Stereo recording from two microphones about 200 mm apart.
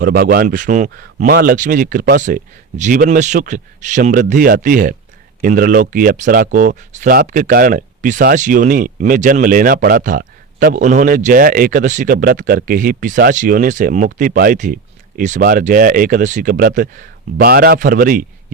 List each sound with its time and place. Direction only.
0.0 s speech: 50° right (ahead or behind)